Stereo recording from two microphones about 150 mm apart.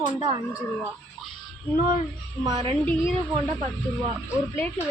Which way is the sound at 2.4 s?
25° right (ahead or behind).